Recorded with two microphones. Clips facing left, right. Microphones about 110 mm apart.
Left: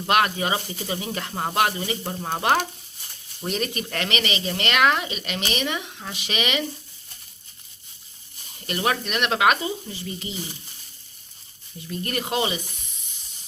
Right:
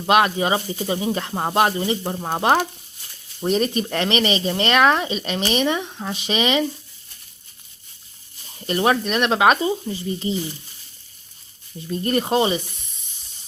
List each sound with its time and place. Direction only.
0.0 s speech: 25° right (ahead or behind)
3.4 s speech: 40° right (ahead or behind)
3.8 s speech: 25° right (ahead or behind)
8.6 s speech: 30° right (ahead or behind)
11.9 s speech: 35° right (ahead or behind)